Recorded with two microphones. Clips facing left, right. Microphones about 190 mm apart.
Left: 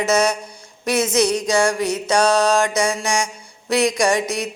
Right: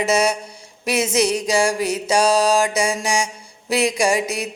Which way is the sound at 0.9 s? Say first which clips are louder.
Left 1 dB; 30° right (ahead or behind).